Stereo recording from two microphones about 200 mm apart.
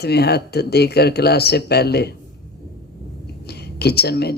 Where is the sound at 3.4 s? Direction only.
55° left (ahead or behind).